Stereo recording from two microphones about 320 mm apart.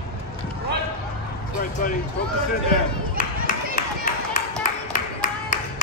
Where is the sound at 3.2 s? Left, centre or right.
Left.